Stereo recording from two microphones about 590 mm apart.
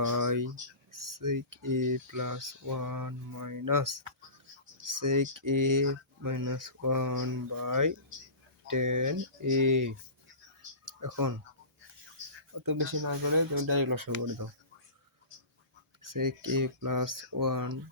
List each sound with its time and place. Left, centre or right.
0.0 s speech: right
10.8 s a sound: right
12.5 s speech: right
16.0 s speech: right